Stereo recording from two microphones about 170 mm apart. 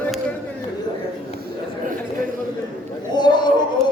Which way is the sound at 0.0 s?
10° left (ahead or behind).